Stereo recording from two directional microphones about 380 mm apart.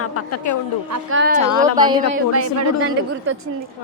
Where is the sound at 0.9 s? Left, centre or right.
Right.